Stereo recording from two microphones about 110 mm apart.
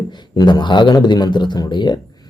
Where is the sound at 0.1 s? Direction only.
40° left (ahead or behind).